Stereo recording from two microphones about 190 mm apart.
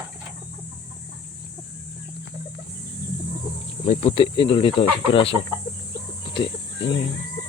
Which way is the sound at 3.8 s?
30° left (ahead or behind).